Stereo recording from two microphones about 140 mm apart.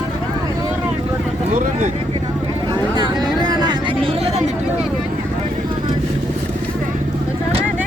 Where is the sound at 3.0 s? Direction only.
30° right (ahead or behind).